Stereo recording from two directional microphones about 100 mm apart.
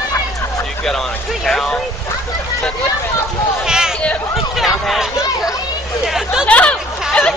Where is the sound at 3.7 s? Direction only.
5° right (ahead or behind).